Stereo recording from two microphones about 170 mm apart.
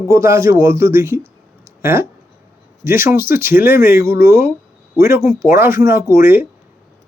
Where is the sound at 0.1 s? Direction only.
15° right (ahead or behind).